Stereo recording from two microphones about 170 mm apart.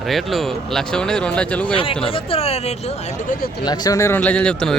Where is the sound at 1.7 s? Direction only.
30° left (ahead or behind).